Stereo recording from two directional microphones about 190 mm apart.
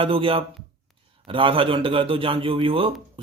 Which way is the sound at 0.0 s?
30° right (ahead or behind).